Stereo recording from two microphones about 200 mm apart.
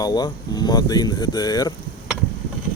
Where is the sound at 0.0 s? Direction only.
20° left (ahead or behind).